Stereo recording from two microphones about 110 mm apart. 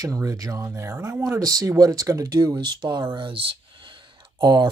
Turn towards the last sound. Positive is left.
turn(degrees=-45)  # may be behind; listen again after turning